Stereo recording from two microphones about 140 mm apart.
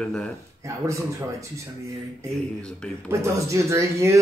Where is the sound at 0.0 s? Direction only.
5° left (ahead or behind).